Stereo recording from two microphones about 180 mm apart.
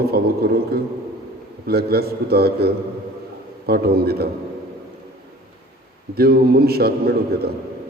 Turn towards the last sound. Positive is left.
turn(degrees=-60)  # may be behind; listen again after turning